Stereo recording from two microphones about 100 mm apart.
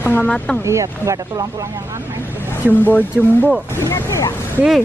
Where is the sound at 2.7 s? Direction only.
20° left (ahead or behind).